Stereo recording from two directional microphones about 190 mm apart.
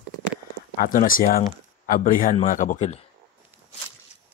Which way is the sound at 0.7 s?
50° left (ahead or behind).